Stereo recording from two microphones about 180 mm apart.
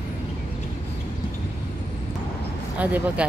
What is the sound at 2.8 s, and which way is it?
Speech, 10° right (ahead or behind).